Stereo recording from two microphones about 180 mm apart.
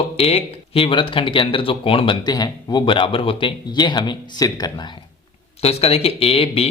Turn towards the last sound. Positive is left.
turn(degrees=35)  # may be behind; listen again after turning